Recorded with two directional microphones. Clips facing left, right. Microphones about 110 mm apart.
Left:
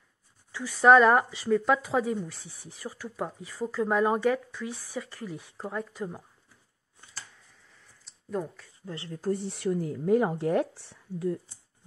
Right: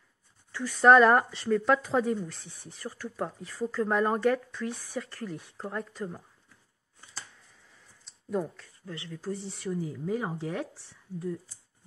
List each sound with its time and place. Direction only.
0.5 s speech: 5° left (ahead or behind)
8.0 s a sound: centre (ahead or behind)
8.8 s speech: 35° left (ahead or behind)
9.2 s speech: 60° left (ahead or behind)